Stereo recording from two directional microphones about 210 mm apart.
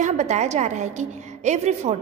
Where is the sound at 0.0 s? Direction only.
35° right (ahead or behind).